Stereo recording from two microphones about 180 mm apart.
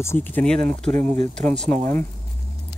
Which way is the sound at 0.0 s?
10° left (ahead or behind).